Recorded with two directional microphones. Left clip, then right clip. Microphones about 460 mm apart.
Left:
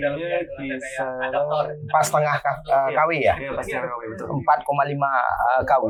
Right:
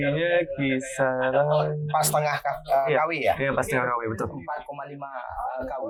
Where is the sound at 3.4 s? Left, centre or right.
Right.